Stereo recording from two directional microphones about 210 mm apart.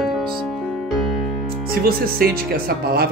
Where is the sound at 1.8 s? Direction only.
45° right (ahead or behind).